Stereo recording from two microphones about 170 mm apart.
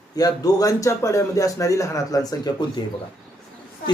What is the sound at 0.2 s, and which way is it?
Speech, 20° left (ahead or behind).